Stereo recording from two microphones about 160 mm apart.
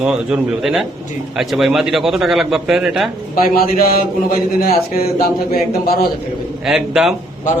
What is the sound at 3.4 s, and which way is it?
A man's voice, 65° left (ahead or behind).